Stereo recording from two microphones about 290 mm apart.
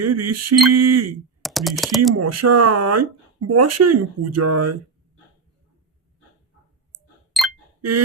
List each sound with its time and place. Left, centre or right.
0.0 s speech: right
1.4 s typing: centre
2.1 s speech: right
7.3 s chink: centre
7.8 s a sound: right